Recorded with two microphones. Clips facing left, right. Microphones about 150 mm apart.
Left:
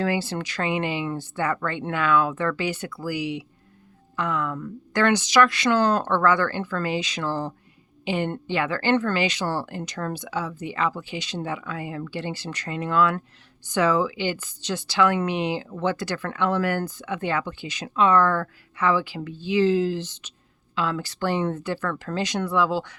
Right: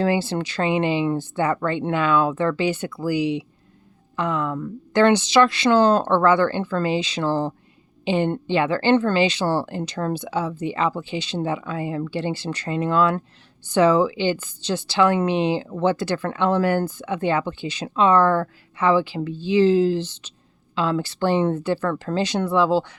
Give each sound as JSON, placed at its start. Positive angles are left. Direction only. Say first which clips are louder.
{"t": 0.0, "sound": "speech", "louder": "right 4 dB", "side_deg": -25}